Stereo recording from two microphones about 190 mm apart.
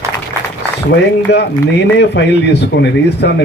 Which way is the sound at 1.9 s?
65° left (ahead or behind).